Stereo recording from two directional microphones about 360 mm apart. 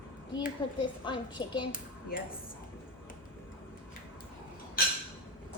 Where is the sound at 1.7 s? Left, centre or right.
Left.